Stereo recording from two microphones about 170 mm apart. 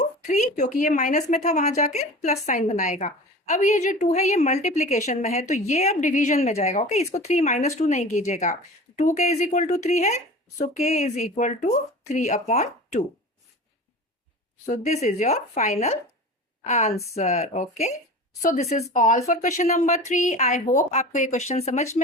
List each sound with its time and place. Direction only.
0.3 s speech: 45° left (ahead or behind)
14.7 s speech: 40° left (ahead or behind)